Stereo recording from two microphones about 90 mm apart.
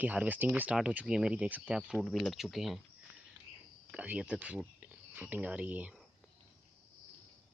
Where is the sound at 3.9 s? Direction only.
15° right (ahead or behind).